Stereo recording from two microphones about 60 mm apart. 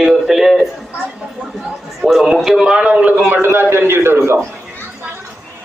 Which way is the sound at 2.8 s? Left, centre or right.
Right.